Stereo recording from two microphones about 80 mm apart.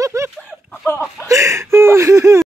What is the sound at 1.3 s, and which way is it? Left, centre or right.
Speech, right.